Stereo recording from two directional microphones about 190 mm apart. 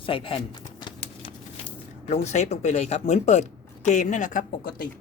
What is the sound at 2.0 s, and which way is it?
A woman's voice, 35° left (ahead or behind).